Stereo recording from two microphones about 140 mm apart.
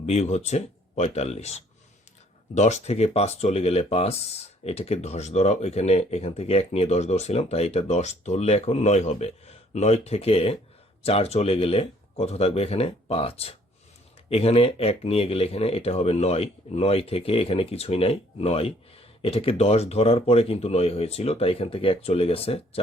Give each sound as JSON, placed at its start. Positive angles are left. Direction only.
{"t": 0.0, "sound": "speech", "side_deg": 50}